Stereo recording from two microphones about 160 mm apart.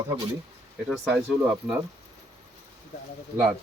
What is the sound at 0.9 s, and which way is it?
Speech, 5° right (ahead or behind).